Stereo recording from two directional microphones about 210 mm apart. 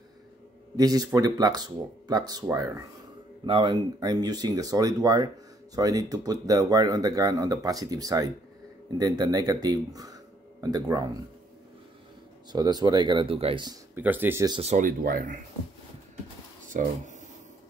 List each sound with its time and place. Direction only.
0.7 s speech: 20° right (ahead or behind)
12.5 s speech: 20° right (ahead or behind)
13.9 s speech: 10° right (ahead or behind)
14.6 s speech: 35° right (ahead or behind)
16.6 s speech: 35° right (ahead or behind)